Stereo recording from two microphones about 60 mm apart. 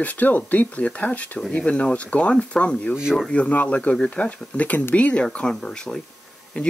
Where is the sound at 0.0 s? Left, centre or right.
Left.